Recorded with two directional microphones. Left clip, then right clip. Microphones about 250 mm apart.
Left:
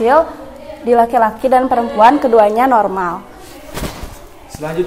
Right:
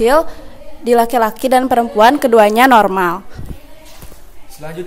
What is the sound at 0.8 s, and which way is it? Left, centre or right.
Speech, right.